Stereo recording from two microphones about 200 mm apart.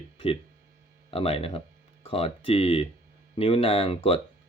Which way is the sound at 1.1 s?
30° left (ahead or behind).